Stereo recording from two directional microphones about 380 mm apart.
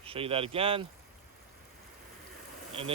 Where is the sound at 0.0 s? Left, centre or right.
Centre.